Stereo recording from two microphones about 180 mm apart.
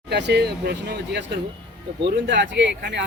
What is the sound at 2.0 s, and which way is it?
Speech, 80° right.